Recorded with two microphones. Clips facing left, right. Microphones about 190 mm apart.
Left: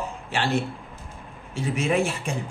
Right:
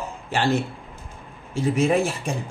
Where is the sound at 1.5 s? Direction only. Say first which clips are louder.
Right 4 dB; 40° right (ahead or behind).